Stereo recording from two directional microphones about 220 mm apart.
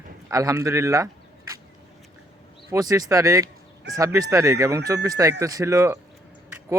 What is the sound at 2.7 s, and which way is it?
Speech, 15° right (ahead or behind).